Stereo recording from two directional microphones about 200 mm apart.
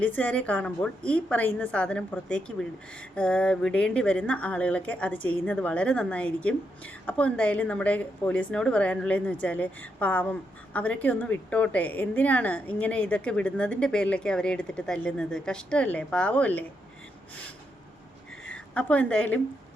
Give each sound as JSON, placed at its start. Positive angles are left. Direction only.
{"t": 0.0, "sound": "a woman's voice", "side_deg": 5}
{"t": 18.4, "sound": "a woman's voice", "side_deg": 5}